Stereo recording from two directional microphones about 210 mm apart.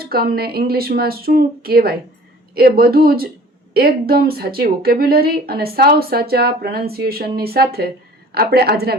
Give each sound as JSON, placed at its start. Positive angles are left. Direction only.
{"t": 0.0, "sound": "speech", "side_deg": -45}